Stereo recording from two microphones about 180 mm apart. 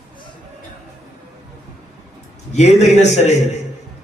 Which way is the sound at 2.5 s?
40° left (ahead or behind).